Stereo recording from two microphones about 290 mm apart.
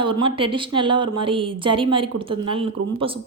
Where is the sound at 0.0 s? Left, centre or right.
Centre.